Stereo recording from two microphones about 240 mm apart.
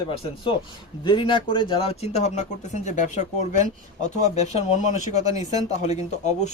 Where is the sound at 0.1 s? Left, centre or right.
Left.